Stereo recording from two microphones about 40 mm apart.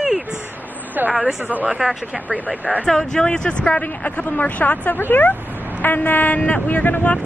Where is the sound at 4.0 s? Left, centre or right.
Left.